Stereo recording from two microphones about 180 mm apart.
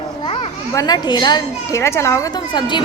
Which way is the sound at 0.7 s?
20° left (ahead or behind).